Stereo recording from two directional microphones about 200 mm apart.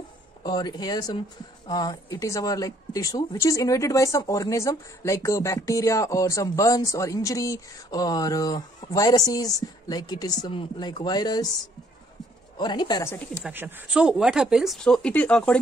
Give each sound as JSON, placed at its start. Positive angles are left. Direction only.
{"t": 0.4, "sound": "a woman's voice", "side_deg": 20}
{"t": 12.5, "sound": "speech", "side_deg": 20}
{"t": 13.4, "sound": "speech", "side_deg": -10}